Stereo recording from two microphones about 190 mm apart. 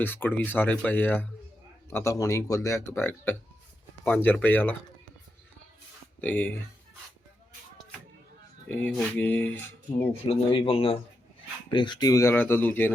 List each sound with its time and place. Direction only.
0.0 s speech: 10° left (ahead or behind)
6.2 s speech: 10° left (ahead or behind)
8.7 s speech: 5° left (ahead or behind)
10.1 s speech: 30° left (ahead or behind); by 12.9 s 10° left (ahead or behind)